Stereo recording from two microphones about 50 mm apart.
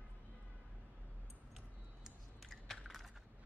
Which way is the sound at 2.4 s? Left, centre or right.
Centre.